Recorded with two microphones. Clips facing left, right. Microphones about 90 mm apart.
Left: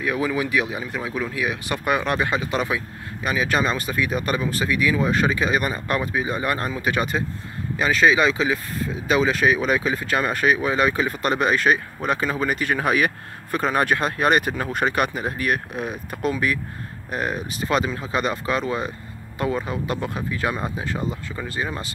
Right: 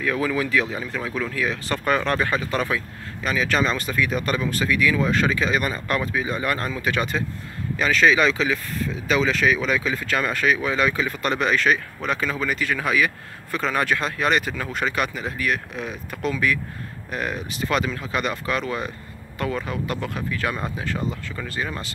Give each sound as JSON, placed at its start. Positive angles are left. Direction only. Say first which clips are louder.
{"t": 0.0, "sound": "speech", "louder": "even", "side_deg": 15}
{"t": 8.4, "sound": "speech", "louder": "left 1 dB", "side_deg": 30}
{"t": 9.8, "sound": "speech", "louder": "left 1 dB", "side_deg": 25}
{"t": 10.3, "sound": "speech", "louder": "left 2 dB", "side_deg": 40}
{"t": 12.0, "sound": "speech", "louder": "left 2 dB", "side_deg": 20}
{"t": 12.4, "sound": "speech", "louder": "left 2 dB", "side_deg": 45}